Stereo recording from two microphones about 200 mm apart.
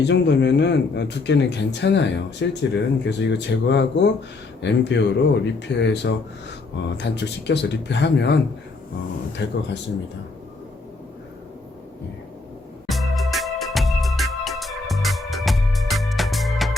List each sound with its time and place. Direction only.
0.0 s speech: 60° left (ahead or behind)
9.4 s speech: 60° left (ahead or behind)
12.9 s organ: centre (ahead or behind)